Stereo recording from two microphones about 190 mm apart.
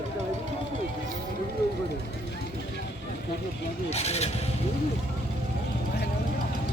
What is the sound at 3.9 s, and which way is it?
Vehicle, 35° left (ahead or behind).